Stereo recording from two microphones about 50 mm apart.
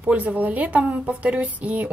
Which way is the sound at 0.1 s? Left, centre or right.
Right.